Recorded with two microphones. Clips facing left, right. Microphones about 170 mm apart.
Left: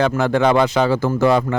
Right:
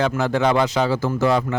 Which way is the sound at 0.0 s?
60° left (ahead or behind).